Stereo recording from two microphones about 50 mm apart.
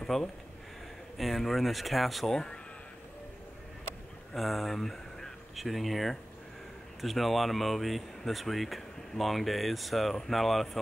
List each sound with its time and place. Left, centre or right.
0.0 s speech: centre
2.3 s speech: centre
4.3 s speech: centre